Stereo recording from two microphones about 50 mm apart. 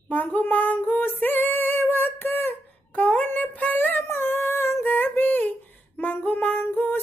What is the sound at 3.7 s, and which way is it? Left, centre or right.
Music, left.